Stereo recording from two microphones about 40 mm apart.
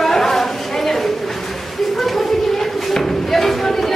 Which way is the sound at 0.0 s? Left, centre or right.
Centre.